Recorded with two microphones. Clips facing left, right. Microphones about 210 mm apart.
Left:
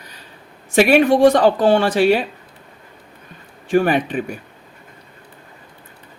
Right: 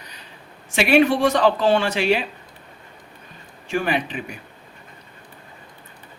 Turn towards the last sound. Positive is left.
turn(degrees=50)  # may be behind; listen again after turning